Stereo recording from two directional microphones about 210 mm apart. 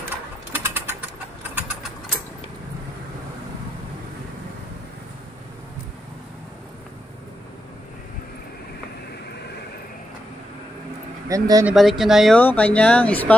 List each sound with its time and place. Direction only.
0.5 s bird: 10° right (ahead or behind)
11.2 s speech: 15° right (ahead or behind)
11.7 s speech: centre (ahead or behind)